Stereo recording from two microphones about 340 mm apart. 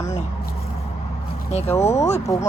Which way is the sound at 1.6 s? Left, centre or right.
Centre.